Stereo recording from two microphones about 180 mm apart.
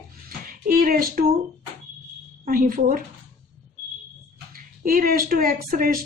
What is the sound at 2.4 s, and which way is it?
Speech, 50° right (ahead or behind).